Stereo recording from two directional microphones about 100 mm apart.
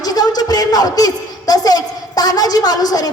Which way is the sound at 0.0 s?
40° left (ahead or behind).